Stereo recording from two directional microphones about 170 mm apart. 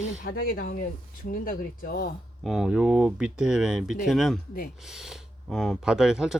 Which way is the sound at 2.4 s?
Centre (ahead or behind).